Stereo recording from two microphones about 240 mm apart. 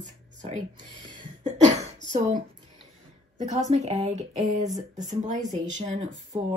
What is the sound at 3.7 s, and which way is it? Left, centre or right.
A woman's voice, right.